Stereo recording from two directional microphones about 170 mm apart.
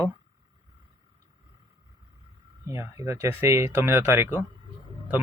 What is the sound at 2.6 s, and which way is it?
Speech, 15° right (ahead or behind).